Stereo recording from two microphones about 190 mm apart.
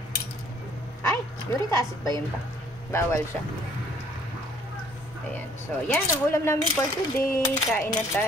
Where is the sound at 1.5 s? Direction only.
15° left (ahead or behind).